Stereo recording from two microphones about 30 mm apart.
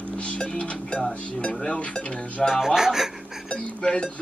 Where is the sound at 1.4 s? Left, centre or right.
Left.